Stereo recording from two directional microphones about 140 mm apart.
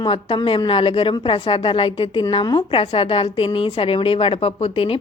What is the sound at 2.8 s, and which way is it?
A woman's voice, 45° left (ahead or behind).